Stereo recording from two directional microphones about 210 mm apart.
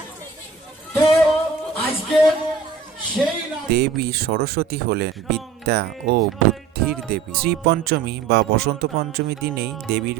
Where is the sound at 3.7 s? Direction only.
50° right (ahead or behind).